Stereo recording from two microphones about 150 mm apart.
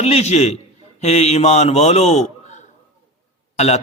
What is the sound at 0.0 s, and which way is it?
A man's voice, 45° left (ahead or behind).